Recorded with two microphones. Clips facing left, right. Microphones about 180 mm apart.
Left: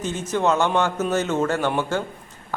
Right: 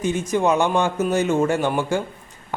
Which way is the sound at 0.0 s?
15° right (ahead or behind).